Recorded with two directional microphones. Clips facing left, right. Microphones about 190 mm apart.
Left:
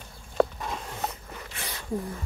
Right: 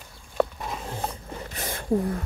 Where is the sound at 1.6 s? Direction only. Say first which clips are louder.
Right 8 dB; 50° right (ahead or behind).